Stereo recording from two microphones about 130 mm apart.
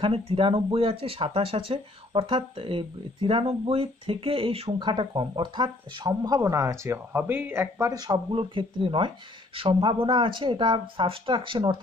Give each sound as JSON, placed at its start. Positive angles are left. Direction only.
{"t": 0.0, "sound": "speech", "side_deg": -45}
{"t": 8.1, "sound": "speech", "side_deg": -40}